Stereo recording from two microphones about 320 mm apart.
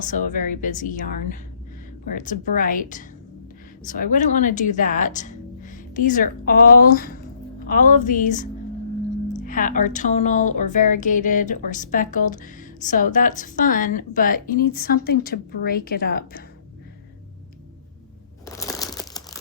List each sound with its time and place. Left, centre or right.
0.0 s speech: left
18.4 s crumpling: centre